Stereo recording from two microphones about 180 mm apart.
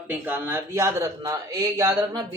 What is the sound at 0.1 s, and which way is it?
A man's voice, 10° right (ahead or behind).